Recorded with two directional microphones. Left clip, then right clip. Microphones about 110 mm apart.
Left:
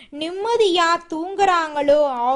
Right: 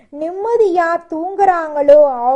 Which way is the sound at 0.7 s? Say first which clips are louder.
Right 3 dB; 5° left (ahead or behind).